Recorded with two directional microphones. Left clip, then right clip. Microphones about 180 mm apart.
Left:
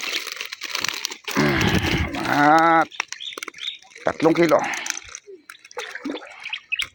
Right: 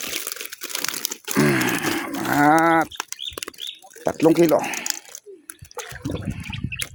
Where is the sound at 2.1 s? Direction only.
15° right (ahead or behind).